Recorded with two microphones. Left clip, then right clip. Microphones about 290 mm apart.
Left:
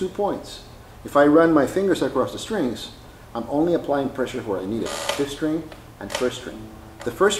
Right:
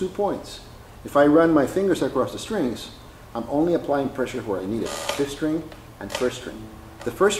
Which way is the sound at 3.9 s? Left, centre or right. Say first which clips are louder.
Left 1 dB; centre.